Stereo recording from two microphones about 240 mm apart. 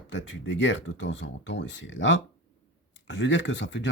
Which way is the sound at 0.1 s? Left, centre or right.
Left.